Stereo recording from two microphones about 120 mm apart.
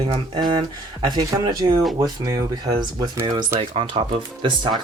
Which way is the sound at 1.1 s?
35° right (ahead or behind).